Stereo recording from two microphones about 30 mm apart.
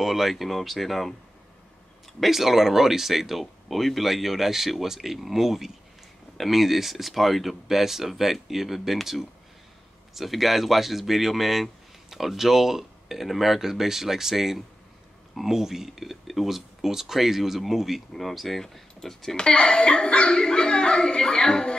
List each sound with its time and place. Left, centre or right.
0.0 s speech: centre
2.1 s speech: centre
18.1 s speech: centre
18.6 s speech: centre
19.3 s a sound: left